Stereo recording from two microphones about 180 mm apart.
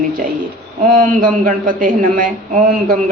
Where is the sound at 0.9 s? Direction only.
50° right (ahead or behind).